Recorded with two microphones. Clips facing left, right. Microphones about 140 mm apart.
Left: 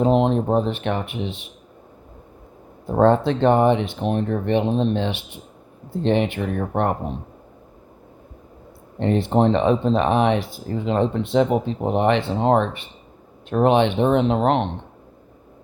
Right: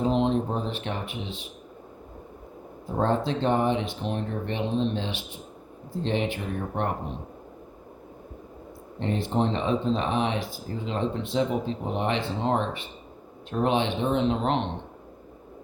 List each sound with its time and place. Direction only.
0.0 s speech: 60° left (ahead or behind)
3.0 s speech: 65° left (ahead or behind)
9.0 s speech: 65° left (ahead or behind)